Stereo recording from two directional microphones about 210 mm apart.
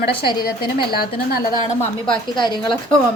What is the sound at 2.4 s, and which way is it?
Speech, 20° left (ahead or behind).